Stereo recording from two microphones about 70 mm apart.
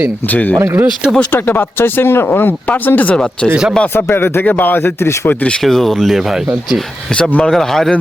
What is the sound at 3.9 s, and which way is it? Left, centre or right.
Speech, left.